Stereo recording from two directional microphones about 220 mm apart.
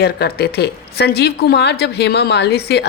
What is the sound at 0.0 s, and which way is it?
A woman's voice, 45° left (ahead or behind).